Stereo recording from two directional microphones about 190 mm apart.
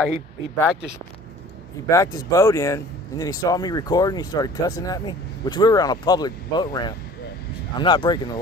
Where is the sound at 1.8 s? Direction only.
15° left (ahead or behind).